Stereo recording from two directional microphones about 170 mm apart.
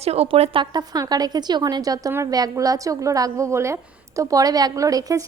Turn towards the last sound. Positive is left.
turn(degrees=-20)  # may be behind; listen again after turning